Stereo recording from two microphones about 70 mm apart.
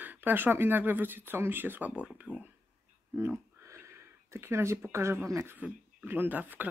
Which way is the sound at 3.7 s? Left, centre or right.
Right.